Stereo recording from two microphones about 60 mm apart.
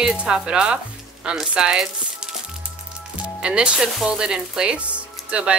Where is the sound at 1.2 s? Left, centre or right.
Centre.